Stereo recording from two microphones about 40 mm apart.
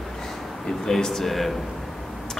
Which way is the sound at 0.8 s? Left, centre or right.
Centre.